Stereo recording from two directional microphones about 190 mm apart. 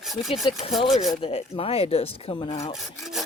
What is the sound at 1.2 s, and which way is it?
Speech, 30° left (ahead or behind).